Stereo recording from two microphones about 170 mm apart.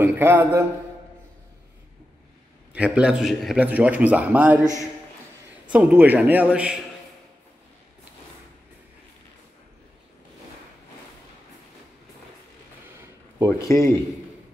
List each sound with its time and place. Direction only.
0.0 s a man's voice: 15° right (ahead or behind)
2.7 s a man's voice: 5° right (ahead or behind)
5.7 s a man's voice: 5° right (ahead or behind)
13.5 s speech: 15° left (ahead or behind)